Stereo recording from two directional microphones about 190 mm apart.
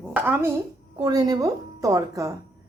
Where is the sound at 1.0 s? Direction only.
20° right (ahead or behind).